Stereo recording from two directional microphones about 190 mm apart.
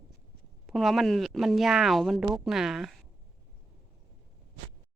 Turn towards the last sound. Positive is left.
turn(degrees=0)  # may be behind; listen again after turning